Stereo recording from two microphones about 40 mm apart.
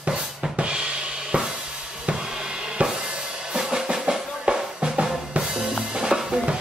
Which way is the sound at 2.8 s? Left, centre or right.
Right.